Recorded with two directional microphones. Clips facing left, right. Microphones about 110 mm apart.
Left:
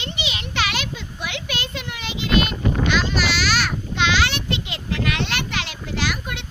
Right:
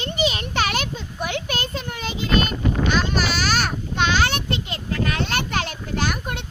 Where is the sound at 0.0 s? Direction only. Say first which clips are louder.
Right 7 dB; 40° right (ahead or behind).